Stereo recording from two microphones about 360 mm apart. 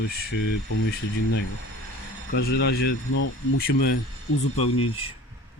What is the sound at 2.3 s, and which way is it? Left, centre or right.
Speech, left.